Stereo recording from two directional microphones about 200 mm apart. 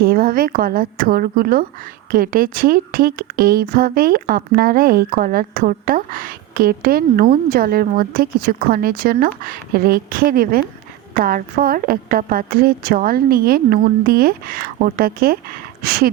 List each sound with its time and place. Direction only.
0.0 s a woman's voice: 50° right (ahead or behind)